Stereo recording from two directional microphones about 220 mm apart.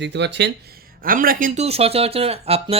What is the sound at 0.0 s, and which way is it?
Speech, 50° right (ahead or behind).